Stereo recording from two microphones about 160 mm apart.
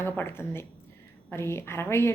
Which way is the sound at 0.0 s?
15° left (ahead or behind).